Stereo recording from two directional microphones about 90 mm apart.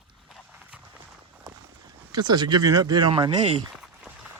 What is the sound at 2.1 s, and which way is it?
Speech, 50° right (ahead or behind).